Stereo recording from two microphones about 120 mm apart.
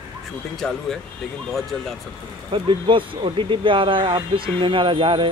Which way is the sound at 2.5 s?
45° right (ahead or behind).